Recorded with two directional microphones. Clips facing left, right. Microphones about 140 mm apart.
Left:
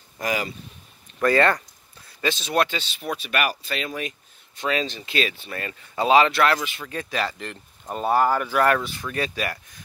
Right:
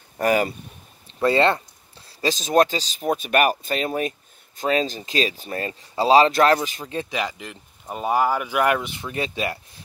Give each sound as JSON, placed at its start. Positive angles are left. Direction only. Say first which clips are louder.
{"t": 0.2, "sound": "speech", "louder": "right 7 dB", "side_deg": -50}
{"t": 1.2, "sound": "speech", "louder": "right 1 dB", "side_deg": -25}
{"t": 6.9, "sound": "speech", "louder": "right 3 dB", "side_deg": -25}
{"t": 7.2, "sound": "speech", "louder": "even", "side_deg": -10}